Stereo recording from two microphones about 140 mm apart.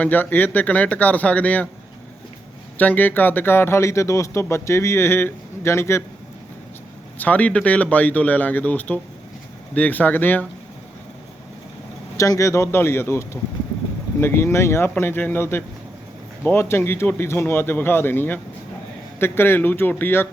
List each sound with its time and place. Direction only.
0.0 s speech: 15° left (ahead or behind)
2.7 s speech: 10° left (ahead or behind)
7.2 s speech: 10° left (ahead or behind)
12.1 s speech: 20° left (ahead or behind)